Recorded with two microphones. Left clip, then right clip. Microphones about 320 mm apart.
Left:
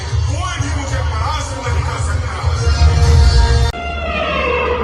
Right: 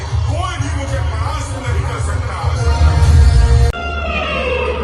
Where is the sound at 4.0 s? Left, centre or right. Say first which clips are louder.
Left 2 dB; left.